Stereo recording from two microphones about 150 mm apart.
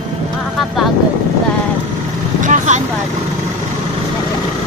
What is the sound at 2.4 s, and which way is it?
Vehicle, 50° right (ahead or behind).